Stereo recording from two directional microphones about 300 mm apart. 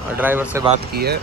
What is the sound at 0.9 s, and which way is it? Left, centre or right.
Speech, right.